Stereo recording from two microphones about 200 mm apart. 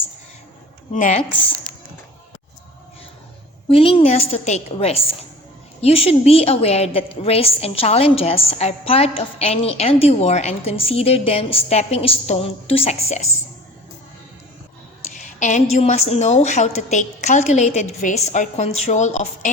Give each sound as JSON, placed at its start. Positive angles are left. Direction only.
{"t": 0.9, "sound": "a woman's voice", "side_deg": 40}
{"t": 3.7, "sound": "a woman's voice", "side_deg": 25}
{"t": 15.1, "sound": "a sound", "side_deg": 35}
{"t": 15.7, "sound": "a woman's voice", "side_deg": 35}